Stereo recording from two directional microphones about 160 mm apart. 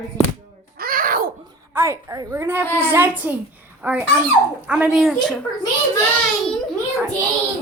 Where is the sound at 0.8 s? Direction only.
65° right (ahead or behind).